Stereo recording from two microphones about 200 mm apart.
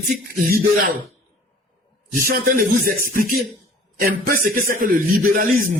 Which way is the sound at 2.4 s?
45° right (ahead or behind).